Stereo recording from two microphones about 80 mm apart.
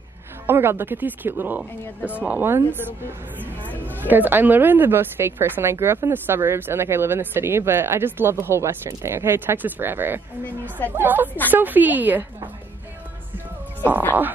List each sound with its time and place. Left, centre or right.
0.5 s speech: right
3.6 s a woman's voice: left
4.1 s speech: right